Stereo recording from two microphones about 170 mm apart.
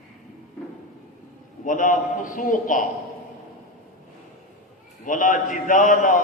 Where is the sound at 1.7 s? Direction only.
50° left (ahead or behind).